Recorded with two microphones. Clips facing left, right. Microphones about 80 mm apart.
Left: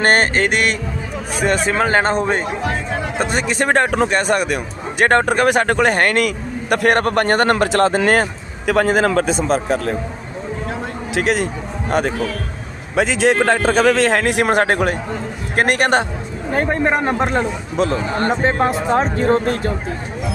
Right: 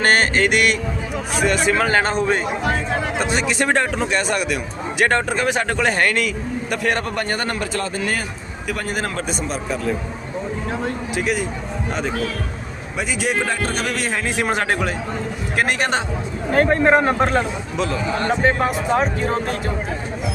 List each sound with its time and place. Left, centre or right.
0.0 s music: left
1.8 s music: left
3.2 s speech: left
11.1 s speech: left
11.9 s speech: left
13.0 s a man's voice: left
14.6 s speech: left
16.5 s speech: centre
17.2 s speech: centre
17.7 s music: left
18.3 s speech: left
19.1 s speech: left